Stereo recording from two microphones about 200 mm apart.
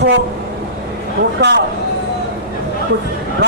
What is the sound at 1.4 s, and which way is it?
Speech, 60° right (ahead or behind).